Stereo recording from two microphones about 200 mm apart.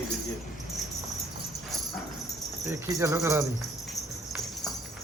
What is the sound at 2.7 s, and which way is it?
Speech, 15° right (ahead or behind).